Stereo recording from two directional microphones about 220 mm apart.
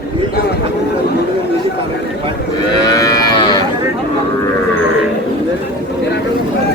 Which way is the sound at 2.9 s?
15° left (ahead or behind).